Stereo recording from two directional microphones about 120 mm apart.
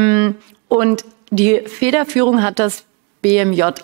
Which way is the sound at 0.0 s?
15° right (ahead or behind).